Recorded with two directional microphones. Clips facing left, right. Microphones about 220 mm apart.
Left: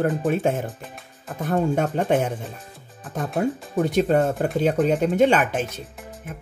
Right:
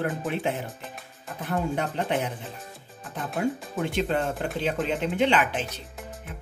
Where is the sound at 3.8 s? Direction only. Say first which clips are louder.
Left 10 dB; 40° left (ahead or behind).